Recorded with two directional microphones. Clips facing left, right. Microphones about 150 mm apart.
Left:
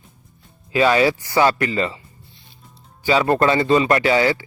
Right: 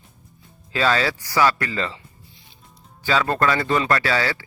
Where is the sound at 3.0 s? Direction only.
15° left (ahead or behind).